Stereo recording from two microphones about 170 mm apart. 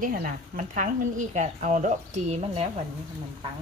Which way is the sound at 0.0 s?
55° right (ahead or behind).